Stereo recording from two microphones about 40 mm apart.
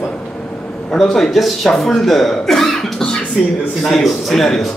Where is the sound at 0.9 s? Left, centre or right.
Centre.